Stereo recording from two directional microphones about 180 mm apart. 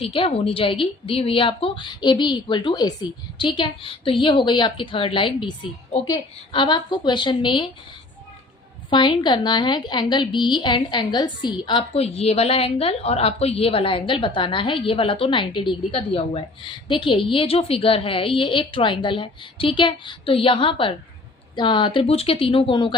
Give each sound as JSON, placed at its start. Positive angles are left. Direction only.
{"t": 0.0, "sound": "a woman's voice", "side_deg": 30}
{"t": 8.9, "sound": "a woman's voice", "side_deg": 25}